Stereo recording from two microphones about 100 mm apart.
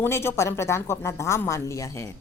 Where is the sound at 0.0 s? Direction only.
25° left (ahead or behind).